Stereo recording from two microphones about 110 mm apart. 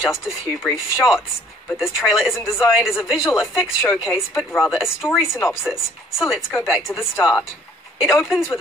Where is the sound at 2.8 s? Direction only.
5° right (ahead or behind).